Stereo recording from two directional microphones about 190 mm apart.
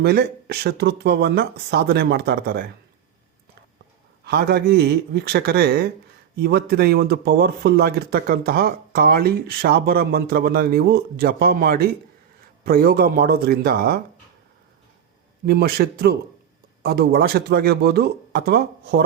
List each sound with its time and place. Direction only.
0.0 s speech: 55° right (ahead or behind)
4.3 s speech: 55° right (ahead or behind)
15.4 s speech: 55° right (ahead or behind)